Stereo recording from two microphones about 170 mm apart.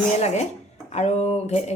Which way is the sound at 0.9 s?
40° left (ahead or behind).